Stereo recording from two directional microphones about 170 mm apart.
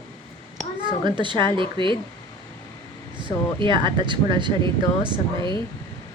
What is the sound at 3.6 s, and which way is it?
Speech, 25° right (ahead or behind).